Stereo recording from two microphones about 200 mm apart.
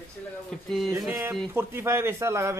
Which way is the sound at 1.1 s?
10° right (ahead or behind).